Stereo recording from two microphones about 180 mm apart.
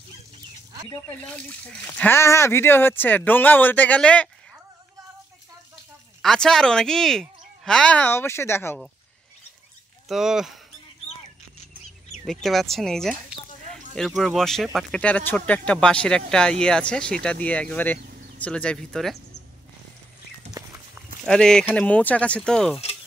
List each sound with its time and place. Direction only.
1.0 s speech: 5° left (ahead or behind)
6.2 s speech: 5° left (ahead or behind)
10.0 s speech: centre (ahead or behind)
12.3 s speech: centre (ahead or behind)
20.6 s horse: 20° right (ahead or behind)
21.3 s speech: 5° left (ahead or behind)